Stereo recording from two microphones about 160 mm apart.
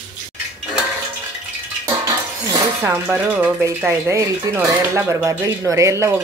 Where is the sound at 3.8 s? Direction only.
20° right (ahead or behind).